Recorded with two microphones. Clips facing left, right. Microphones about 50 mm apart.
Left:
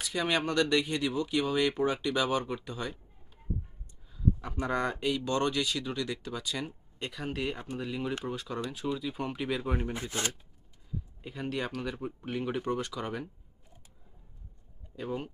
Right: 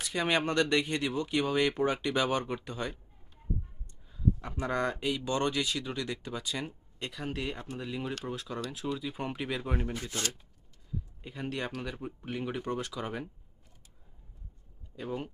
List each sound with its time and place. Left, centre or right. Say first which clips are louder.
0.0 s speech: right 1 dB; centre
4.1 s a sound: even; centre
4.6 s speech: left 1 dB; centre
6.7 s speech: left 1 dB; centre
9.9 s speech: left 2 dB; left
11.2 s speech: left 2 dB; centre
14.9 s speech: left 1 dB; centre